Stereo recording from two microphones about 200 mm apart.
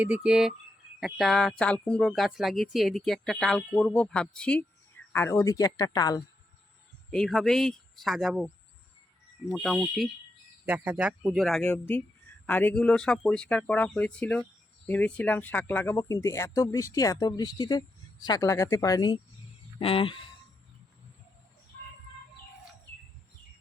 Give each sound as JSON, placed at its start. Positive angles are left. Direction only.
{"t": 0.0, "sound": "speech", "side_deg": -5}
{"t": 7.1, "sound": "speech", "side_deg": 0}